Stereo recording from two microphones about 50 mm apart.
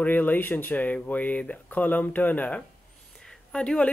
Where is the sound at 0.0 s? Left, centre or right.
Left.